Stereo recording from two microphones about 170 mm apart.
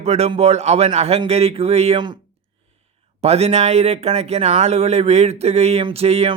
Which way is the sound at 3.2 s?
40° right (ahead or behind).